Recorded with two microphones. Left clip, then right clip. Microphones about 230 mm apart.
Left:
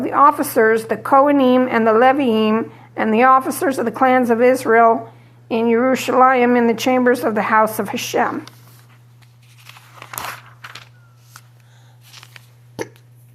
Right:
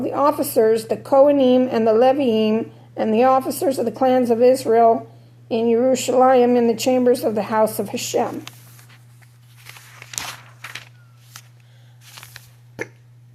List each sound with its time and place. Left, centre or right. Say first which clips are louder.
0.0 s a woman's voice: left 5 dB; centre
12.1 s biting: even; centre